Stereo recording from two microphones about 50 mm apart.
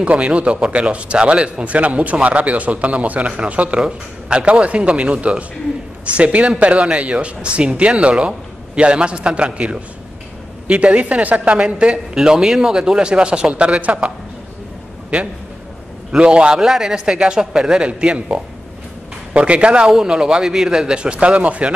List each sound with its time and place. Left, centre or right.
0.0 s speech: right
11.5 s speech: centre
16.2 s a man's voice: right